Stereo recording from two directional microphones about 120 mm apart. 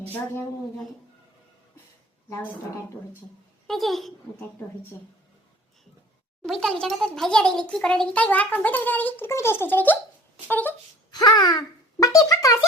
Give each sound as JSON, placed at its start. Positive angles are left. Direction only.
{"t": 2.3, "sound": "a woman's voice", "side_deg": 20}
{"t": 3.7, "sound": "a child's voice", "side_deg": 0}
{"t": 6.4, "sound": "a child's voice", "side_deg": 5}
{"t": 11.1, "sound": "speech", "side_deg": 35}